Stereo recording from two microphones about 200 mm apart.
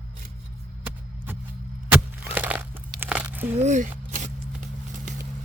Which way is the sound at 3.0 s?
5° right (ahead or behind).